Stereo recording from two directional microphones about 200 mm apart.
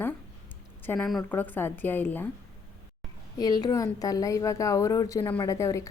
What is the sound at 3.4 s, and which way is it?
A woman's voice, 20° left (ahead or behind).